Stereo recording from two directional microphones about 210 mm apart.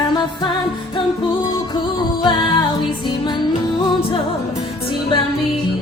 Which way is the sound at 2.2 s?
20° left (ahead or behind).